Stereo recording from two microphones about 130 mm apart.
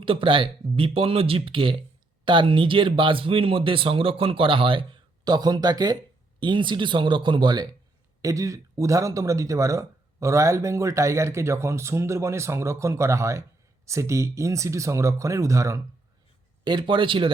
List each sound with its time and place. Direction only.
0.0 s speech: 40° right (ahead or behind); by 15.8 s 25° right (ahead or behind)
16.6 s speech: 40° right (ahead or behind)